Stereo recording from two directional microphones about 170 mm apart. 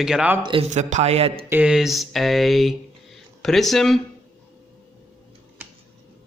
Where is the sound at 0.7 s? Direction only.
45° right (ahead or behind).